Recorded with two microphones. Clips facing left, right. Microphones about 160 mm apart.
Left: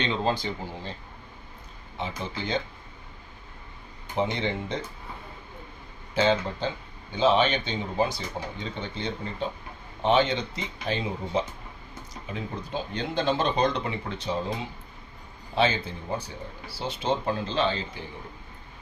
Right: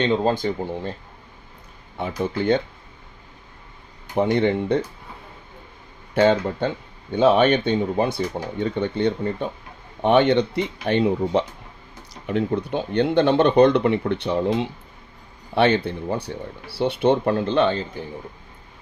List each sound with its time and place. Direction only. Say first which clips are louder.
0.0 s speech: right 7 dB; 50° right (ahead or behind)
2.2 s speech: right 12 dB; 60° right (ahead or behind)
4.1 s speech: right 8 dB; 60° right (ahead or behind)
6.1 s speech: right 6 dB; 60° right (ahead or behind)